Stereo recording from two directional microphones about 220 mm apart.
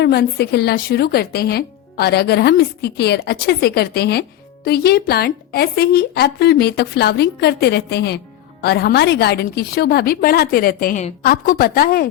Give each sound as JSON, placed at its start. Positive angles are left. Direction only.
{"t": 0.0, "sound": "a woman's voice", "side_deg": 45}